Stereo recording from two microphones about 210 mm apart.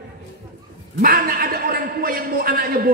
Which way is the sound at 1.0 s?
45° right (ahead or behind).